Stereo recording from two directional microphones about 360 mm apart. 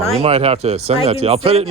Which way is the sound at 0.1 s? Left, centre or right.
Centre.